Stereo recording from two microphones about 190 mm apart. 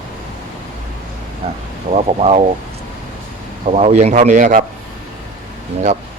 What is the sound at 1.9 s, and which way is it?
Speech, 35° right (ahead or behind).